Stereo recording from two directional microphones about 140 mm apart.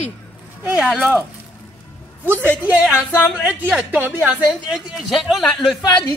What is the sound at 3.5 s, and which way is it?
Speech, 10° right (ahead or behind).